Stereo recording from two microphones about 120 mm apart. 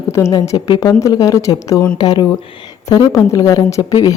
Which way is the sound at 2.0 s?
40° left (ahead or behind).